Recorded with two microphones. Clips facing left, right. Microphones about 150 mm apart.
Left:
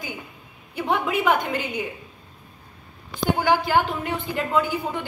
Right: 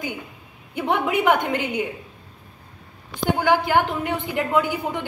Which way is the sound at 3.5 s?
15° right (ahead or behind).